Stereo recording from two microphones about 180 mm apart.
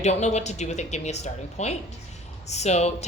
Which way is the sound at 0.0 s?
40° left (ahead or behind).